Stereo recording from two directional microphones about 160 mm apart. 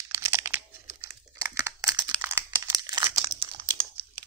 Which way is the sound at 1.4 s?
20° right (ahead or behind).